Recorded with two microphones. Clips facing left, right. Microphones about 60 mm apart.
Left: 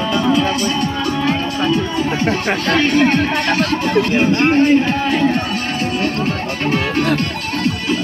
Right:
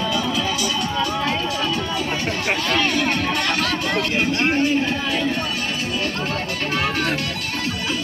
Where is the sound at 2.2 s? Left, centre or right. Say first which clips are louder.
Left 5 dB; left.